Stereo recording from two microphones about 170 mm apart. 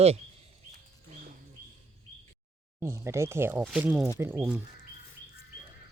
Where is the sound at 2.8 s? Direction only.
15° right (ahead or behind).